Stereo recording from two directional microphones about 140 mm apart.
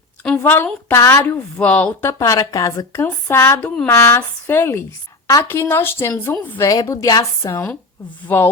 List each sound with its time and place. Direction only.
0.2 s a woman's voice: 10° left (ahead or behind)